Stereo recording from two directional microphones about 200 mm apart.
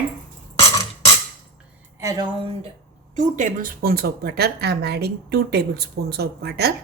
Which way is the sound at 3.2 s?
40° right (ahead or behind).